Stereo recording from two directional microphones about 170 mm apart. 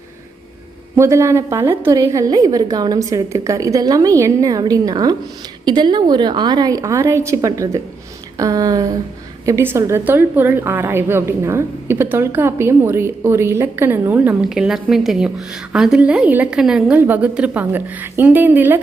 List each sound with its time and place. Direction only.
0.9 s a woman's voice: 15° right (ahead or behind)